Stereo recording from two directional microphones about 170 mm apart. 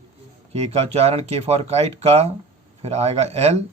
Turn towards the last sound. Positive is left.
turn(degrees=-40)  # may be behind; listen again after turning